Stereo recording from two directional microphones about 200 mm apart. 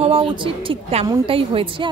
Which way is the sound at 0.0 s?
25° right (ahead or behind).